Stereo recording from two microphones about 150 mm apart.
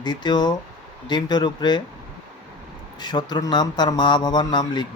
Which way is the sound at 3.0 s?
30° left (ahead or behind).